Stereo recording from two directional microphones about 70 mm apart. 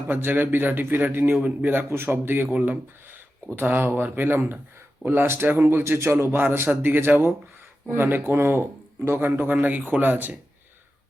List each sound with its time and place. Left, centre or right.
0.1 s a man's voice: right
2.5 s a man's voice: centre
3.5 s a man's voice: right